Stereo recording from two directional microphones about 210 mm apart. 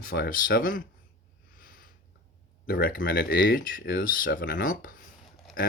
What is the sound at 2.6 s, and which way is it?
Speech, 45° left (ahead or behind).